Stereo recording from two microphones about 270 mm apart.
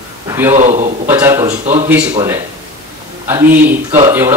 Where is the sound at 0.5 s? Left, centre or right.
Right.